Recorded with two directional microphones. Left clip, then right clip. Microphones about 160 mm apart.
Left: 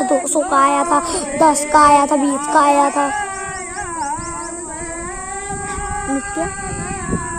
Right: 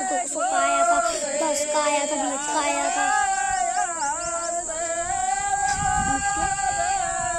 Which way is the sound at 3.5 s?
20° right (ahead or behind).